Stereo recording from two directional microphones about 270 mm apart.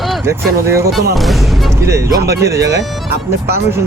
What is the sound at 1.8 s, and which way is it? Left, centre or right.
Speech, centre.